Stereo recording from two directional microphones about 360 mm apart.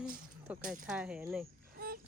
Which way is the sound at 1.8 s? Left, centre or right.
Right.